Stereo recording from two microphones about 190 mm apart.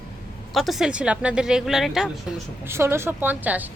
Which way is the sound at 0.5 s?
Centre (ahead or behind).